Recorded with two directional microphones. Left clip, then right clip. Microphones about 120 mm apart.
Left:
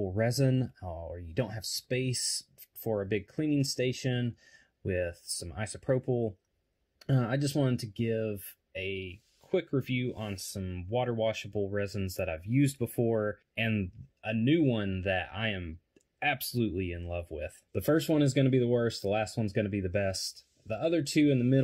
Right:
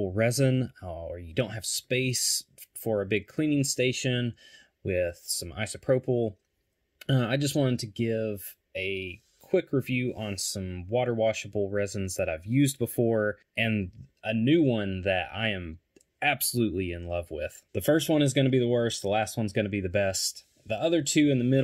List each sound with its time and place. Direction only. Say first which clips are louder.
0.0 s speech: right 4 dB; 30° right (ahead or behind)
17.7 s speech: right 3 dB; 15° right (ahead or behind)